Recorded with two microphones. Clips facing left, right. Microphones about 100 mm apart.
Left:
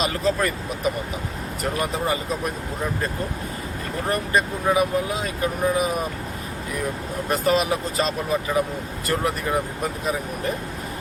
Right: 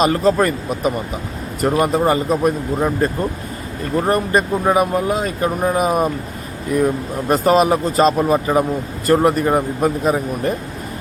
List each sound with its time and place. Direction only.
0.0 s speech: 45° right (ahead or behind)